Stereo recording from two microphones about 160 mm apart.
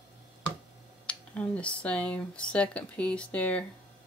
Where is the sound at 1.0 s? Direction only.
10° left (ahead or behind).